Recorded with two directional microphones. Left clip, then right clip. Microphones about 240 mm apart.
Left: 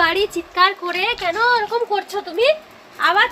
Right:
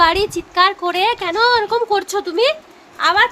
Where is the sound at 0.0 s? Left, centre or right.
Centre.